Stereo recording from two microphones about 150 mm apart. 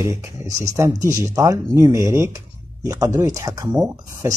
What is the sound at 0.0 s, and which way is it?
Speech, 20° right (ahead or behind).